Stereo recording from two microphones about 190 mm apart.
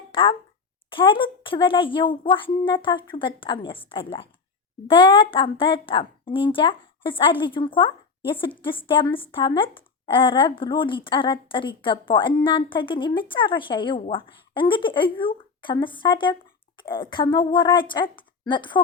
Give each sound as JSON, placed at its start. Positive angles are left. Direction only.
{"t": 0.1, "sound": "a woman's voice", "side_deg": 25}